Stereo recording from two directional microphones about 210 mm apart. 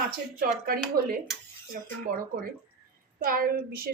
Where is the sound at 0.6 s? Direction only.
45° right (ahead or behind).